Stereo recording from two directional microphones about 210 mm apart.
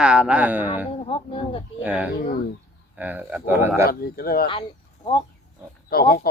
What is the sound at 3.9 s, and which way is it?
Speech, 45° left (ahead or behind).